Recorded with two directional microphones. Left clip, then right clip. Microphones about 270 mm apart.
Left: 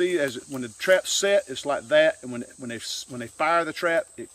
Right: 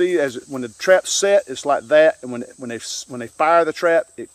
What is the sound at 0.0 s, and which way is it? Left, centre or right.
Speech, centre.